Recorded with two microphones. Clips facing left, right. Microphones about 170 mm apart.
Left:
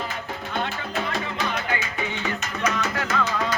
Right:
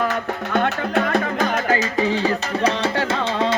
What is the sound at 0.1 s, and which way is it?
Music, 60° right (ahead or behind).